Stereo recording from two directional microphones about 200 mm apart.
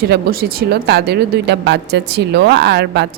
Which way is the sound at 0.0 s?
50° right (ahead or behind).